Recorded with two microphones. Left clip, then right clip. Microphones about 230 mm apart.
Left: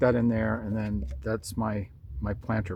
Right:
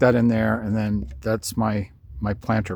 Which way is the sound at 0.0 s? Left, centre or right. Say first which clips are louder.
Right 6 dB; right.